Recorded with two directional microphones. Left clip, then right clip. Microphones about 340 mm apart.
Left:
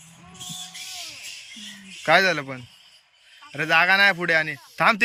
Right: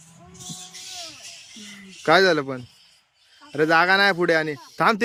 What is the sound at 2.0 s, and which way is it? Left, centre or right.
Speech, centre.